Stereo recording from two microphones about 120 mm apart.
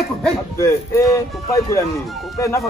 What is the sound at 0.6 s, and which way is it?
A man's voice, 25° left (ahead or behind).